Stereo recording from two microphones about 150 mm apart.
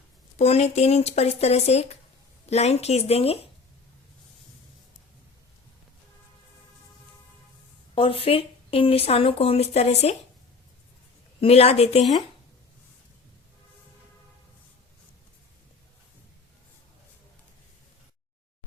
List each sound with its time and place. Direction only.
0.3 s speech: 45° left (ahead or behind)
7.9 s speech: 35° left (ahead or behind)
11.3 s speech: 40° left (ahead or behind)